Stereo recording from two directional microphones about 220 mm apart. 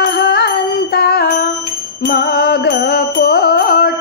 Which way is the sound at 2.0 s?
45° left (ahead or behind).